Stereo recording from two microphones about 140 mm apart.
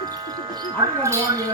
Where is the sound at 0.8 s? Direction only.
25° right (ahead or behind).